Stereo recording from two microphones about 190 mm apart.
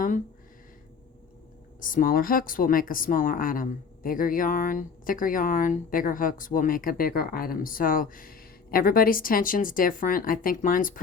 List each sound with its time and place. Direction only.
1.8 s a woman's voice: 45° left (ahead or behind)